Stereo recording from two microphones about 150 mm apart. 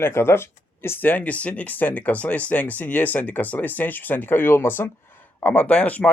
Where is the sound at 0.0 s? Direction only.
15° left (ahead or behind).